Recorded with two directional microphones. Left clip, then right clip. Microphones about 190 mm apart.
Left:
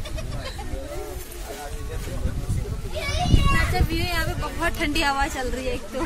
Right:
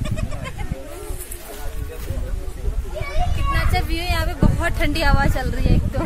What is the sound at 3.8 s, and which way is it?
Speech, 60° right (ahead or behind).